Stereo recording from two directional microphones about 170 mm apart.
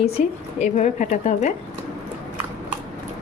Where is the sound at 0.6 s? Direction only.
45° left (ahead or behind).